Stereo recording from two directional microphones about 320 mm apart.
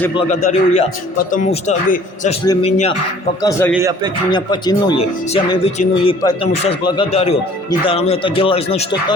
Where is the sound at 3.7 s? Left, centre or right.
Centre.